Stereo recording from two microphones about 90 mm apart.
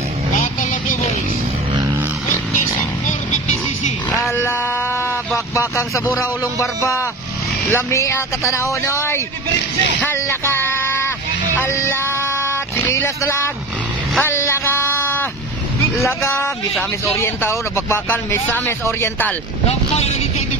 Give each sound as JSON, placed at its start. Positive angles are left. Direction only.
{"t": 5.5, "sound": "speech", "side_deg": 35}
{"t": 12.4, "sound": "a sound", "side_deg": 25}
{"t": 14.2, "sound": "speech", "side_deg": 30}